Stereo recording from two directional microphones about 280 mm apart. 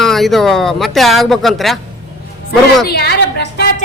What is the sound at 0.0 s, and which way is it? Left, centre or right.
A woman's voice, centre.